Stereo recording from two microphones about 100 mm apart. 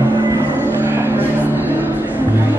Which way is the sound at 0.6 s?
20° right (ahead or behind).